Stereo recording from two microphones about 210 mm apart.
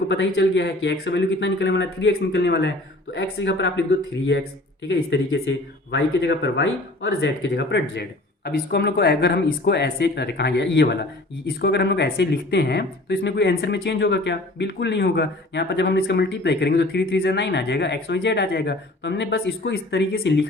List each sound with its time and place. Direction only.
0.1 s speech: 55° left (ahead or behind)